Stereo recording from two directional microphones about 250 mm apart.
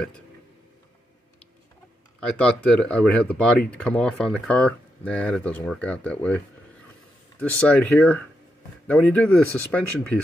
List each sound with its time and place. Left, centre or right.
2.3 s speech: centre